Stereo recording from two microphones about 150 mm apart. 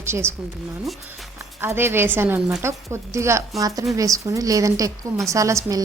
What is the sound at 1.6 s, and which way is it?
A woman's voice, 15° right (ahead or behind).